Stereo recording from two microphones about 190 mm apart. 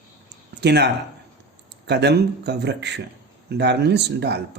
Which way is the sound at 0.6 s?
60° right (ahead or behind).